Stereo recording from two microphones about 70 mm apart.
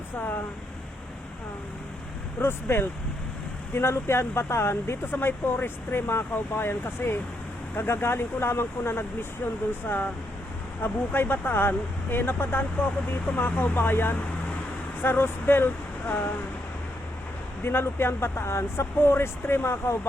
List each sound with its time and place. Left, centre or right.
2.4 s speech: left
10.8 s speech: left
17.6 s speech: left